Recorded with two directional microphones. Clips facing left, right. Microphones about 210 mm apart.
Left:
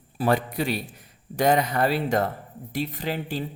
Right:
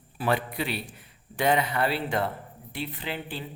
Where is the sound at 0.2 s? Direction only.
45° left (ahead or behind).